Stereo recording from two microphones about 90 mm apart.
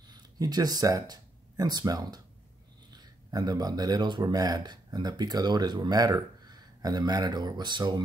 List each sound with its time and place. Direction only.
0.1 s speech: 45° right (ahead or behind)